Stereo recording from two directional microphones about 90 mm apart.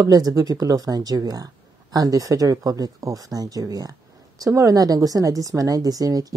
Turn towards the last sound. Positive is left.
turn(degrees=-40)  # may be behind; listen again after turning